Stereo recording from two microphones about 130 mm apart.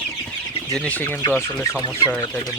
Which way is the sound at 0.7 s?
10° left (ahead or behind).